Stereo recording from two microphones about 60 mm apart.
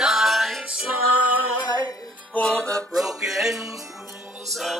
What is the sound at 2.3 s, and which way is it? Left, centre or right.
Music, left.